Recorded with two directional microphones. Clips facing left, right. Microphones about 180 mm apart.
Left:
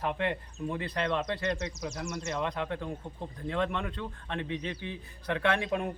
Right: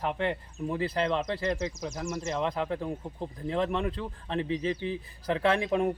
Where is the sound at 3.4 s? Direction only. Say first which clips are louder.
Right 3 dB; 30° right (ahead or behind).